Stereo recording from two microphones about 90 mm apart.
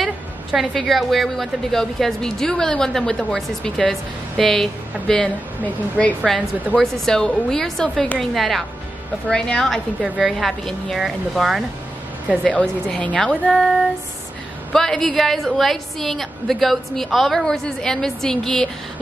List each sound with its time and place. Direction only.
0.0 s a woman's voice: centre (ahead or behind)
5.6 s a woman's voice: 15° left (ahead or behind)
6.8 s a woman's voice: 5° left (ahead or behind)
10.0 s a woman's voice: 10° right (ahead or behind)
10.3 s a woman's voice: centre (ahead or behind)
12.4 s a woman's voice: 15° left (ahead or behind)
13.5 s a woman's voice: centre (ahead or behind)